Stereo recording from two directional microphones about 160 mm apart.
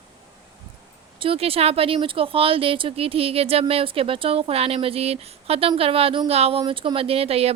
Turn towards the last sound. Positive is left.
turn(degrees=-40)  # may be behind; listen again after turning